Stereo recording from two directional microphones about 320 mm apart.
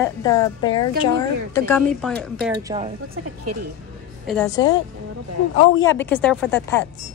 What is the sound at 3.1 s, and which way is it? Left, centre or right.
Speech, right.